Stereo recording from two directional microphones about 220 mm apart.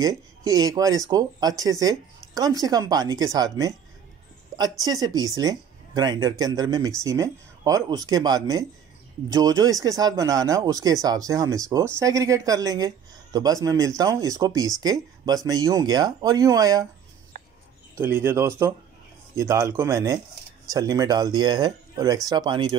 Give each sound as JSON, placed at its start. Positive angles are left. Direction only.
{"t": 0.0, "sound": "speech", "side_deg": -15}
{"t": 4.8, "sound": "speech", "side_deg": -15}
{"t": 17.3, "sound": "a sound", "side_deg": -35}
{"t": 17.9, "sound": "speech", "side_deg": -10}